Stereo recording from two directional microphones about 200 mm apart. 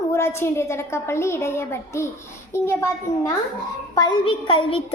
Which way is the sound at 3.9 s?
25° left (ahead or behind).